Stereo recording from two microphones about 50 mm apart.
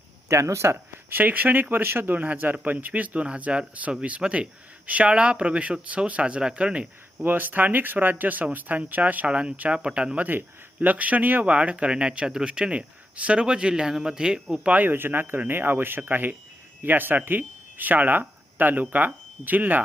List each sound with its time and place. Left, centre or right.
0.3 s speech: right
1.1 s speech: right
1.7 s speech: right
2.1 s speech: right
7.2 s speech: right
9.3 s speech: right
10.2 s speech: right
11.4 s speech: right
14.8 s speech: right